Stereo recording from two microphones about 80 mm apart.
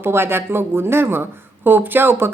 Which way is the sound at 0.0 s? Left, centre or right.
Right.